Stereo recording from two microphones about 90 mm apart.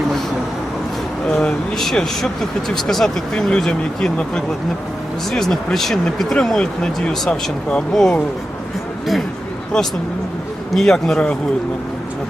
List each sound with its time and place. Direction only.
1.3 s speech: 10° left (ahead or behind)
9.7 s speech: 10° left (ahead or behind)